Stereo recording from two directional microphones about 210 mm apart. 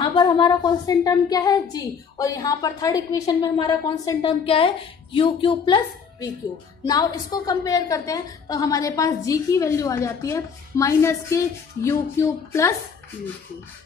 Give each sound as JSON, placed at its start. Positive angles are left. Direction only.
{"t": 0.0, "sound": "a woman's voice", "side_deg": 20}